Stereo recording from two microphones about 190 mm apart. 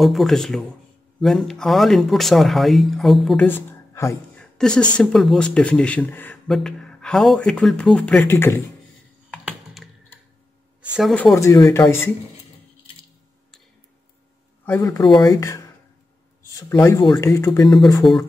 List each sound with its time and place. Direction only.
0.0 s speech: centre (ahead or behind)
3.4 s a sound: 10° left (ahead or behind)
4.9 s speech: centre (ahead or behind)
9.3 s computer keyboard: centre (ahead or behind)
10.8 s speech: centre (ahead or behind)
11.3 s speech: 15° left (ahead or behind)
14.7 s speech: 15° left (ahead or behind)
18.0 s speech: centre (ahead or behind)